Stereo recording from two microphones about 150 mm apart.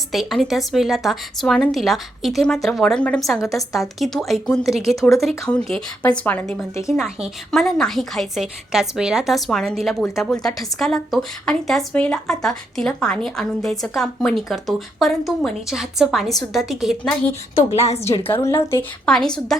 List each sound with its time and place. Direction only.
0.1 s a woman's voice: centre (ahead or behind)
17.7 s a woman's voice: 45° left (ahead or behind)
18.3 s a woman's voice: 15° left (ahead or behind)
19.0 s speech: 5° left (ahead or behind)